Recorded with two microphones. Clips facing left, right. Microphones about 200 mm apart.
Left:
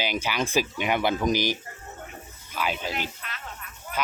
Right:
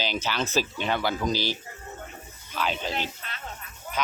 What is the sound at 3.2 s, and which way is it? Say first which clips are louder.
Dog: left 1 dB; 30° right (ahead or behind).